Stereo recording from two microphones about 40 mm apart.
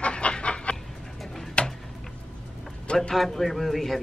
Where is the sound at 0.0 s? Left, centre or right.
Left.